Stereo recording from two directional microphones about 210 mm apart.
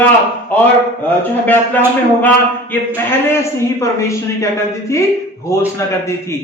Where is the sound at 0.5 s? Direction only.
10° left (ahead or behind).